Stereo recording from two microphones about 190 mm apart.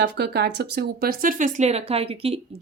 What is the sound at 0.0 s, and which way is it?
A woman's voice, 60° right (ahead or behind).